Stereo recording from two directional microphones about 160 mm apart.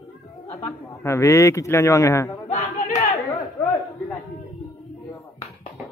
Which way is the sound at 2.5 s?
40° left (ahead or behind).